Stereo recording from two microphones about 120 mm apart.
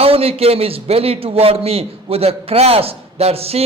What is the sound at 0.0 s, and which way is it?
A man's voice, 55° right (ahead or behind).